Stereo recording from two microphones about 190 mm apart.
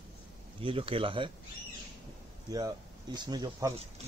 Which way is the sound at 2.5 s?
20° right (ahead or behind).